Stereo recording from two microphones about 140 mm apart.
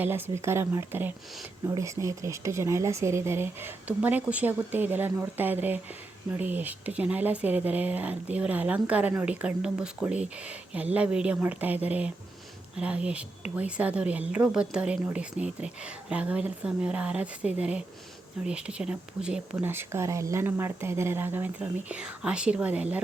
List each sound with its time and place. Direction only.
0.0 s a woman's voice: 15° right (ahead or behind)